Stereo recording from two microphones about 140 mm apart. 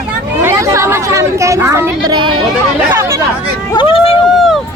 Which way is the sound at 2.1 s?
35° right (ahead or behind).